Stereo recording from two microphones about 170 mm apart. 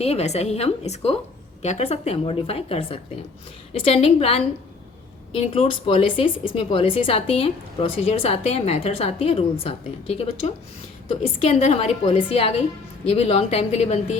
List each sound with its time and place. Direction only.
0.0 s speech: 35° left (ahead or behind)